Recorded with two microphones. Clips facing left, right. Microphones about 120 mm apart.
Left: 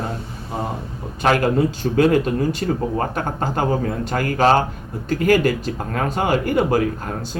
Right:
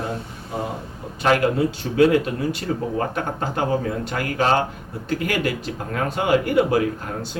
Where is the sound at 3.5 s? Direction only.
45° left (ahead or behind).